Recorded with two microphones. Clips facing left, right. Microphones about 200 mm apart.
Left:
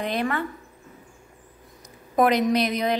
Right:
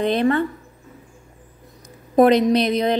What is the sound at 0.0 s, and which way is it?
Speech, 30° right (ahead or behind).